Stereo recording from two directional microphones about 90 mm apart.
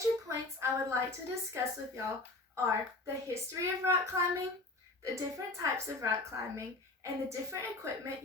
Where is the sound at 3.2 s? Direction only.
35° right (ahead or behind).